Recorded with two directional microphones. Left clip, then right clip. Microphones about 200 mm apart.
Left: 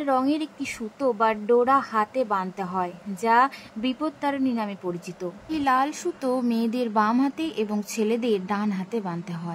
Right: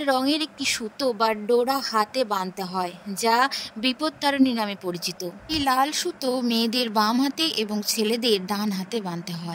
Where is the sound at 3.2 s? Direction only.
45° right (ahead or behind).